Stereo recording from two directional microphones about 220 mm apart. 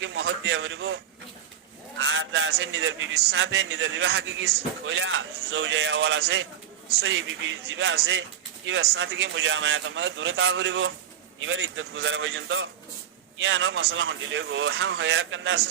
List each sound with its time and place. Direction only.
0.0 s speech: 60° right (ahead or behind)
2.0 s speech: 60° right (ahead or behind)